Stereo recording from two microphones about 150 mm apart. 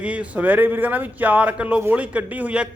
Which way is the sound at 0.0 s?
10° right (ahead or behind).